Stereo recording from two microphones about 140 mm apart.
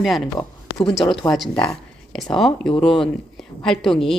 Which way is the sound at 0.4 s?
30° left (ahead or behind).